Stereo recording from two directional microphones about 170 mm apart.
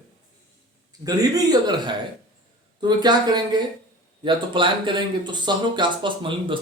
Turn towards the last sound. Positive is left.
turn(degrees=-30)  # may be behind; listen again after turning